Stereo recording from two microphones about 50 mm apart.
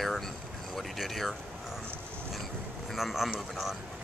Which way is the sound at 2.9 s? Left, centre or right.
Centre.